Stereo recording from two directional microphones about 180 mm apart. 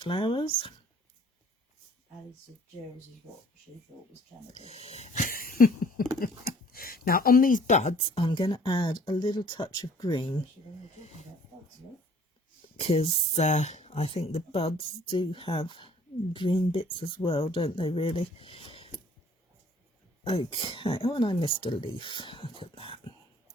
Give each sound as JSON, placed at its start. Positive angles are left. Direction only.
{"t": 0.0, "sound": "speech", "side_deg": 30}
{"t": 4.5, "sound": "a sound", "side_deg": 35}
{"t": 6.1, "sound": "speech", "side_deg": 55}
{"t": 11.0, "sound": "speech", "side_deg": 35}
{"t": 12.8, "sound": "speech", "side_deg": 35}
{"t": 20.2, "sound": "speech", "side_deg": 30}